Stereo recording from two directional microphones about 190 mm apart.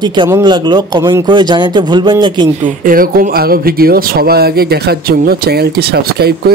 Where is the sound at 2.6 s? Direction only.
45° right (ahead or behind).